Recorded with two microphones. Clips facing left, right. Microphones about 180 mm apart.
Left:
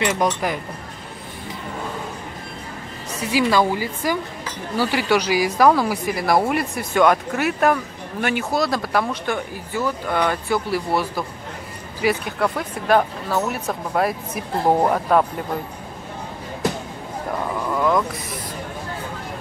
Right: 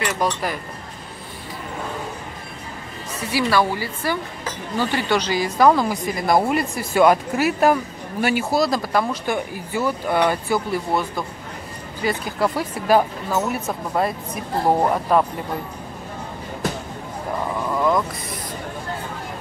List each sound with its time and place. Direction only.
0.0 s a woman's voice: 20° left (ahead or behind)
3.3 s a woman's voice: 15° left (ahead or behind); by 15.2 s centre (ahead or behind)
17.7 s a sound: centre (ahead or behind)